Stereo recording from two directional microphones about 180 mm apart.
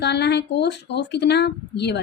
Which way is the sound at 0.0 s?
65° left (ahead or behind).